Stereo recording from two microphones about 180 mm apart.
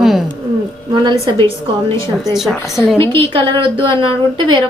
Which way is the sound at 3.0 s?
30° right (ahead or behind).